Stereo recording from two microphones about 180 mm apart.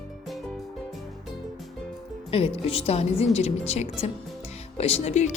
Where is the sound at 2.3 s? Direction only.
35° left (ahead or behind).